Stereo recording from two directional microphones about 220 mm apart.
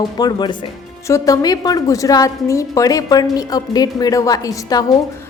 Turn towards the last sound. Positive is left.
turn(degrees=15)  # may be behind; listen again after turning